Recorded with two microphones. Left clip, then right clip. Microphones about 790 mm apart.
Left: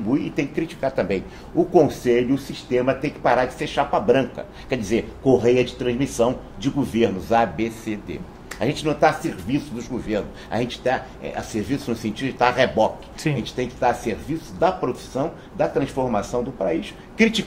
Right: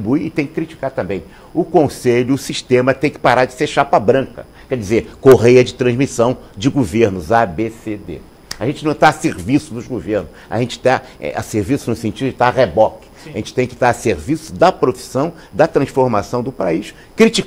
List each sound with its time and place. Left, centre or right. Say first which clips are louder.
0.1 s speech: right 5 dB; right